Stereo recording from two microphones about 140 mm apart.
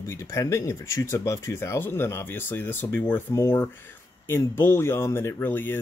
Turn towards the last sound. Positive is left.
turn(degrees=15)  # may be behind; listen again after turning